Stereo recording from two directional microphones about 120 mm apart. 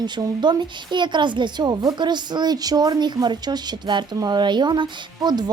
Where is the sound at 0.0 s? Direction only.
40° right (ahead or behind).